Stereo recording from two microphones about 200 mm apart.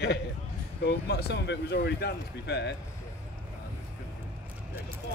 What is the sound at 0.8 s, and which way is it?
Speech, 55° left (ahead or behind).